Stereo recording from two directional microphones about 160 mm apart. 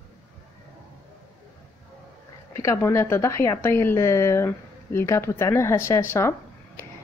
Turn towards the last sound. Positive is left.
turn(degrees=15)  # may be behind; listen again after turning